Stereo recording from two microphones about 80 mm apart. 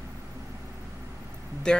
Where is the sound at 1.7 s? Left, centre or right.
Centre.